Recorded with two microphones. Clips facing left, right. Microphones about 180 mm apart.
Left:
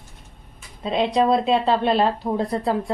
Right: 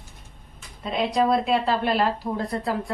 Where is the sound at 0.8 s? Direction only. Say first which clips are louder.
Left 3 dB; 25° left (ahead or behind).